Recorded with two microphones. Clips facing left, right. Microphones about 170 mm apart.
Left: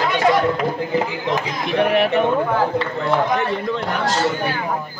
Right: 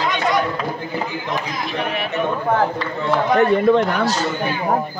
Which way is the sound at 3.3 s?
55° right (ahead or behind).